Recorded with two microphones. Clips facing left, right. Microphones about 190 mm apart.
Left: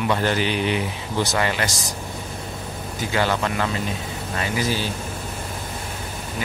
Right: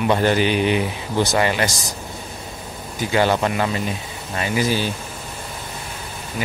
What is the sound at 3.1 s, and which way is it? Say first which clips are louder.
Speech: right 4 dB; 20° right (ahead or behind).